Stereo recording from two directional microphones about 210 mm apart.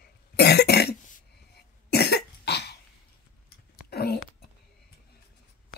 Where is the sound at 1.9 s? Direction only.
50° left (ahead or behind).